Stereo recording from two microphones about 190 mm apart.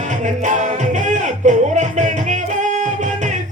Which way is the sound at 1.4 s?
40° right (ahead or behind).